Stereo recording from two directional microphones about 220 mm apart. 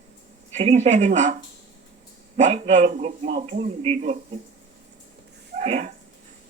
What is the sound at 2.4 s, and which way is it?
A man's voice, 30° right (ahead or behind).